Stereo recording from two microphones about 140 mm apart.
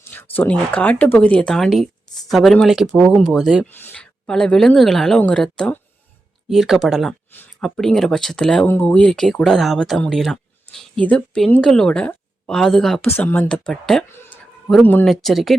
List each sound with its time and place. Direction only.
0.0 s a woman's voice: 15° left (ahead or behind)
3.7 s a woman's voice: 15° left (ahead or behind)
13.1 s a woman's voice: 15° left (ahead or behind)
13.5 s speech: 5° left (ahead or behind)